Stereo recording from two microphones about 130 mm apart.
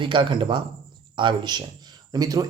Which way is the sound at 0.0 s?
40° right (ahead or behind).